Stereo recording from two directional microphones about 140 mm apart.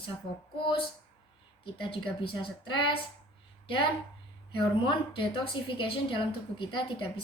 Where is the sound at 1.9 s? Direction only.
35° left (ahead or behind).